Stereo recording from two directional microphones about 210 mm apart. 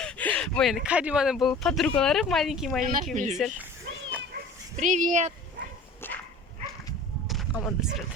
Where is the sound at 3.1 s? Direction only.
35° right (ahead or behind).